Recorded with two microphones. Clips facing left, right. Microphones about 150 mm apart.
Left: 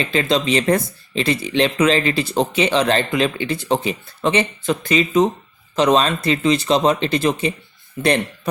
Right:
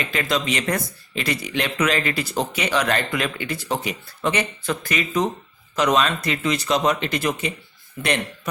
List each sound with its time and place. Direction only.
0.0 s speech: 25° left (ahead or behind)